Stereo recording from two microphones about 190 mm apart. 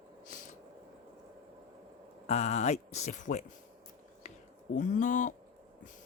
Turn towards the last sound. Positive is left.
turn(degrees=40)  # may be behind; listen again after turning